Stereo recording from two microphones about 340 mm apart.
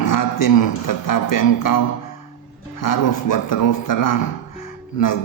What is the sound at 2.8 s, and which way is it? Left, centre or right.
A man's voice, left.